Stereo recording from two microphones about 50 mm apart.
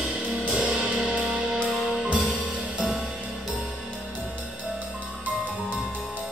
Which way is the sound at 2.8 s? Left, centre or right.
Centre.